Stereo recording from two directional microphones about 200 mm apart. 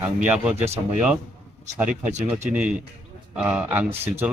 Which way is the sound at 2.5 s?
5° right (ahead or behind).